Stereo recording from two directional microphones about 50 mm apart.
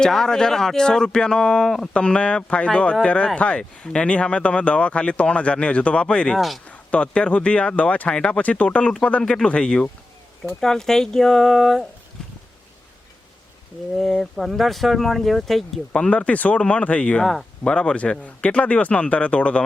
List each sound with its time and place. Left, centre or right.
0.0 s speech: centre
6.3 s speech: centre
6.7 s speech: left; by 11.9 s centre
14.0 s speech: centre
15.9 s speech: left